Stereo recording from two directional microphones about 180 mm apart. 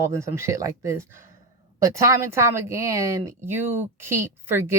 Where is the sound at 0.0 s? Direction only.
15° right (ahead or behind).